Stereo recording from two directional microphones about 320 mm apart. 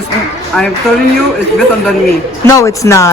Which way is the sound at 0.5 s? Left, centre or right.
Centre.